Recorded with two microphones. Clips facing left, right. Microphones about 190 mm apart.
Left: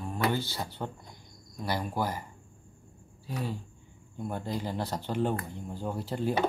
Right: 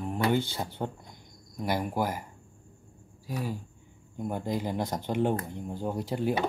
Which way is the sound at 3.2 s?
10° right (ahead or behind).